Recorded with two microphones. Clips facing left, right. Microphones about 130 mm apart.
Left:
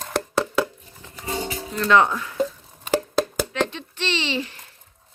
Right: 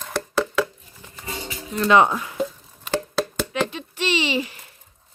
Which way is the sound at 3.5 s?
10° right (ahead or behind).